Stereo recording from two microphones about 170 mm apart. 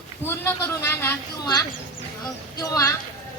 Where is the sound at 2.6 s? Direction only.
20° left (ahead or behind).